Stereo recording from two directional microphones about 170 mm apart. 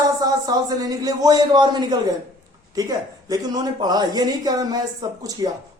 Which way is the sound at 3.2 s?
20° right (ahead or behind).